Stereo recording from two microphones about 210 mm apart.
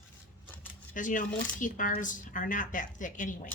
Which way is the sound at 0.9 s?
40° left (ahead or behind).